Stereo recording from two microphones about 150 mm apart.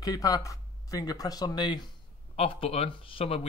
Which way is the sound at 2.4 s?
40° left (ahead or behind).